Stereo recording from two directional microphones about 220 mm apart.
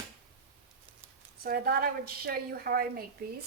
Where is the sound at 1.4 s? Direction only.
45° right (ahead or behind).